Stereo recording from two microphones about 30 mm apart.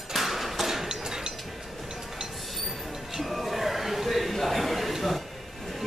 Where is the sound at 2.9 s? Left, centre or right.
Centre.